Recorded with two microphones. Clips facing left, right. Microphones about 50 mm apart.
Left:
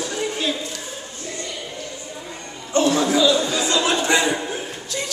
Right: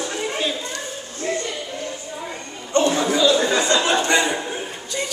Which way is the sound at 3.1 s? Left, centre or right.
Centre.